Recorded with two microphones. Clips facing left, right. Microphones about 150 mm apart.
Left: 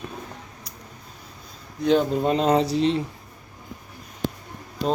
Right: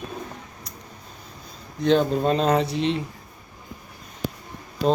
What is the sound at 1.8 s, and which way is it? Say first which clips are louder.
Speech: even; 10° left (ahead or behind).